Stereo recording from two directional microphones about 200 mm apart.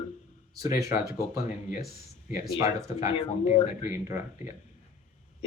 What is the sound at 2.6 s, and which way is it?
Speech, 15° right (ahead or behind).